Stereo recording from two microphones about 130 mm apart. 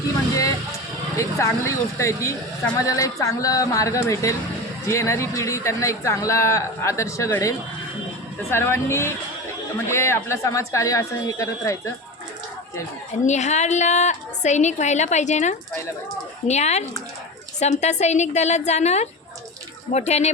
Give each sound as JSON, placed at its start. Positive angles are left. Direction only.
{"t": 1.1, "sound": "a man's voice", "side_deg": 25}
{"t": 13.2, "sound": "a woman's voice", "side_deg": 60}